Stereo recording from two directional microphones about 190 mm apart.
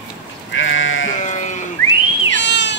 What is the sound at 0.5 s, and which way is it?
Sheep, 90° left.